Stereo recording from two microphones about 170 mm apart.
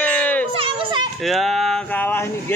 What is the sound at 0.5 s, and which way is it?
Children playing, 30° right (ahead or behind).